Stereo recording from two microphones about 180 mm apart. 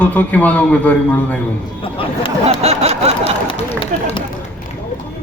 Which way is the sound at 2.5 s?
35° right (ahead or behind).